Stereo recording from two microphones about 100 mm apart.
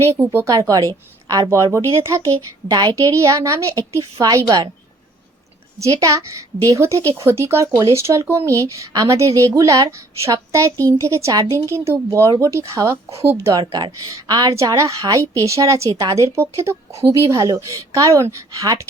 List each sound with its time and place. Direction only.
0.3 s a woman's voice: 30° right (ahead or behind)
5.8 s a woman's voice: 35° right (ahead or behind)
11.3 s a woman's voice: 40° right (ahead or behind)
11.7 s a woman's voice: 30° right (ahead or behind)
13.7 s speech: 50° right (ahead or behind)
14.1 s a woman's voice: 40° right (ahead or behind)
14.5 s a woman's voice: 30° right (ahead or behind)